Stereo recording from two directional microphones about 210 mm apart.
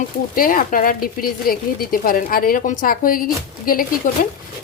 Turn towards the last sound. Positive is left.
turn(degrees=40)  # may be behind; listen again after turning